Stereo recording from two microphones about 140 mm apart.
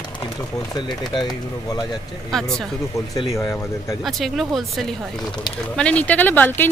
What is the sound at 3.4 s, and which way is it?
Speech, 20° left (ahead or behind).